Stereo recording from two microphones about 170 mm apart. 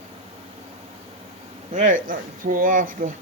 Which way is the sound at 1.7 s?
50° right (ahead or behind).